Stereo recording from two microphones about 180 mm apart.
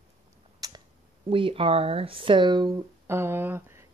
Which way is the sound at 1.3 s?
30° right (ahead or behind).